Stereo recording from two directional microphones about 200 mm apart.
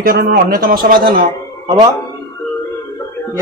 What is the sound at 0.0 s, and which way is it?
Speech, 45° right (ahead or behind).